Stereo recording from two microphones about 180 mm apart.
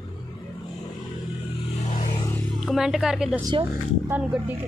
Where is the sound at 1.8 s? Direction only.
40° left (ahead or behind).